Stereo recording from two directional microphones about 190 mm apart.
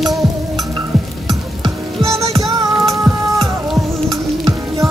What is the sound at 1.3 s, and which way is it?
Music, 25° right (ahead or behind).